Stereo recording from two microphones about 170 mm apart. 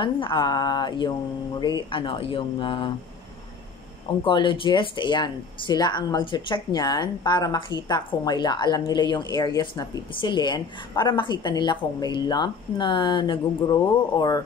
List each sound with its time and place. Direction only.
0.0 s speech: 30° left (ahead or behind)
4.2 s speech: 30° left (ahead or behind)